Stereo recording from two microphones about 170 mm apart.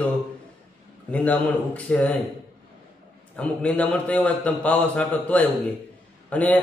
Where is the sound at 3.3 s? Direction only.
5° left (ahead or behind).